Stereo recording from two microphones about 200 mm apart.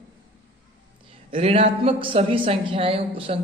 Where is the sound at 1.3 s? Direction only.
30° right (ahead or behind).